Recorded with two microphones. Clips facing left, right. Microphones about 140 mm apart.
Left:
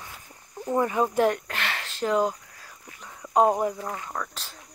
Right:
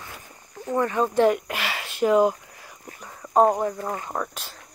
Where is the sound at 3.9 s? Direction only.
30° right (ahead or behind).